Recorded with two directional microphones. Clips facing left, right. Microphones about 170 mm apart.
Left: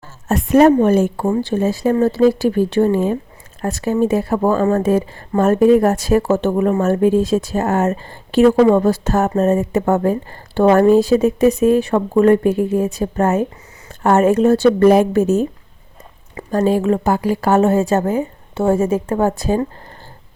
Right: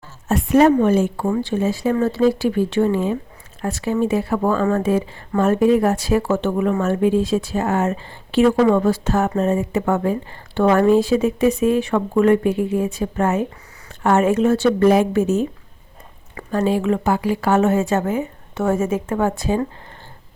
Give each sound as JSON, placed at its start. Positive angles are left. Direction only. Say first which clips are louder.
{"t": 0.3, "sound": "a woman's voice", "louder": "left 3 dB", "side_deg": 45}
{"t": 8.5, "sound": "a woman's voice", "louder": "left 4 dB", "side_deg": 25}
{"t": 8.8, "sound": "speech", "louder": "left 2 dB", "side_deg": 40}
{"t": 16.5, "sound": "speech", "louder": "left 3 dB", "side_deg": 40}